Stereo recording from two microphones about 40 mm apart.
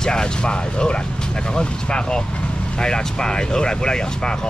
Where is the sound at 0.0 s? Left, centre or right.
Centre.